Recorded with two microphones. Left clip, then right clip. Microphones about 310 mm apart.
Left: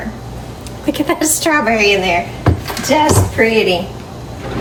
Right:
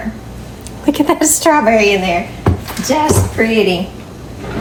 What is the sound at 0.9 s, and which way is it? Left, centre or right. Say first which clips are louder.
A woman's voice: right 3 dB; centre.